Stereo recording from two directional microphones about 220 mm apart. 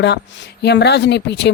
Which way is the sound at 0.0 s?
50° left (ahead or behind).